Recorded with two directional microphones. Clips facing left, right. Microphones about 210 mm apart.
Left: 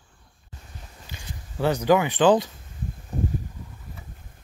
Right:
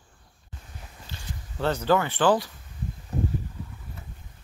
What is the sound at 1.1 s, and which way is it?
Speech, 15° left (ahead or behind).